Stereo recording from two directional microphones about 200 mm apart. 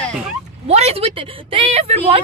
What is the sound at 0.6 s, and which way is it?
A woman's voice, 30° right (ahead or behind).